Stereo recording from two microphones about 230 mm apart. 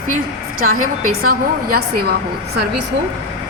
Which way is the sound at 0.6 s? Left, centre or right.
Right.